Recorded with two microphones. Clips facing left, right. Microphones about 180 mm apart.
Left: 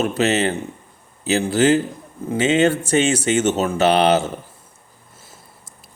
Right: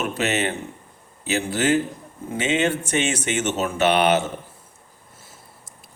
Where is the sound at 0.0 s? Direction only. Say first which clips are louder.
Left 5 dB; 30° left (ahead or behind).